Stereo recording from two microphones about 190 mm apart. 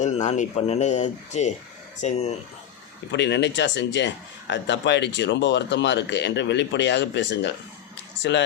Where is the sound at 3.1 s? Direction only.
65° left (ahead or behind).